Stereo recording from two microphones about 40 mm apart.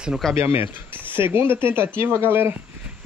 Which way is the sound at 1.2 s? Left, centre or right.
Right.